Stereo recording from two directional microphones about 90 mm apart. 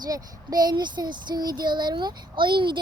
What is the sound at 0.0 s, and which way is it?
Child singing, 50° right (ahead or behind).